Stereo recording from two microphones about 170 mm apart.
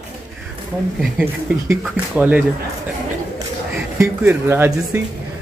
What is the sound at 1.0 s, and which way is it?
Speech, 5° right (ahead or behind).